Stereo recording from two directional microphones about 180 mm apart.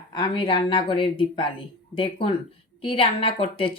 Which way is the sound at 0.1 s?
25° left (ahead or behind).